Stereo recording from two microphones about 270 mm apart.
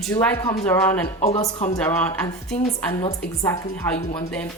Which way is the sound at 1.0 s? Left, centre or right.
Left.